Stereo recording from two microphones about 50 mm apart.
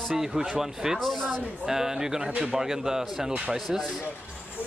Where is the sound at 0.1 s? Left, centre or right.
Centre.